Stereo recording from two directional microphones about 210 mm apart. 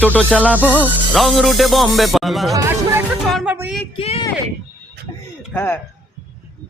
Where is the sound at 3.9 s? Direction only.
25° left (ahead or behind).